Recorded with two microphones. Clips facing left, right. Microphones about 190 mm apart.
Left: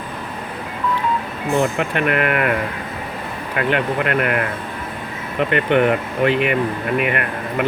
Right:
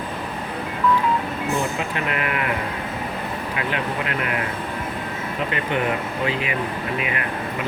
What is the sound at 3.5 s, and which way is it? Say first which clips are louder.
Speech: left 8 dB; 60° left (ahead or behind).